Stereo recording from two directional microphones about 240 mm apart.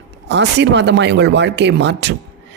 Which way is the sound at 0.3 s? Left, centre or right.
Right.